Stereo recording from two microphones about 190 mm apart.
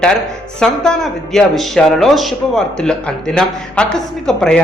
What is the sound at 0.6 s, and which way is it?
A man's voice, 5° left (ahead or behind).